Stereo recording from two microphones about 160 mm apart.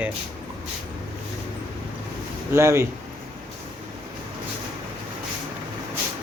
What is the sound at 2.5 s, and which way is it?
Speech, 15° right (ahead or behind).